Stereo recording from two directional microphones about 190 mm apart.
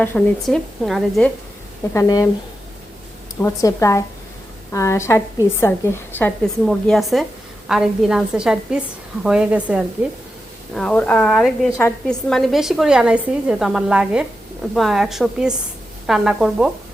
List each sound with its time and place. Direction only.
0.0 s a woman's voice: 5° left (ahead or behind)
1.9 s speech: 15° left (ahead or behind)
3.4 s a woman's voice: 15° left (ahead or behind); by 9.8 s 5° right (ahead or behind)
10.8 s a woman's voice: 5° left (ahead or behind)